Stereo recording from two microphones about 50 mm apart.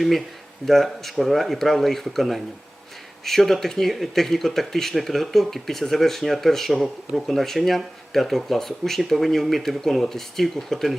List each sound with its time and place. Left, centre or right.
0.7 s speech: centre